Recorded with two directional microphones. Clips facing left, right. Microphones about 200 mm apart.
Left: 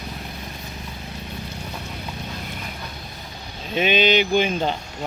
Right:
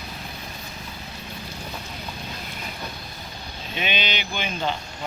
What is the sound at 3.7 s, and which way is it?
Speech, 45° left (ahead or behind).